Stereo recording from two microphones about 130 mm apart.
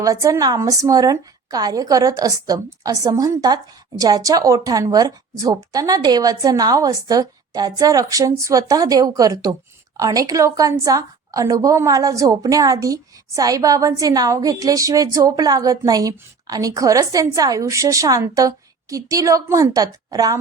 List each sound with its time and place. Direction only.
0.0 s a woman's voice: 25° right (ahead or behind)